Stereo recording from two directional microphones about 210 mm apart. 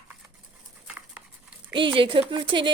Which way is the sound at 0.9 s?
5° right (ahead or behind).